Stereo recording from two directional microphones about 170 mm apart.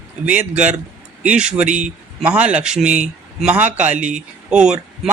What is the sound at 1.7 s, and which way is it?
Speech, 45° right (ahead or behind).